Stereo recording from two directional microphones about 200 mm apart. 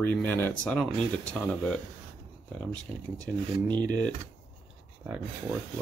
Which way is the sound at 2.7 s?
20° right (ahead or behind).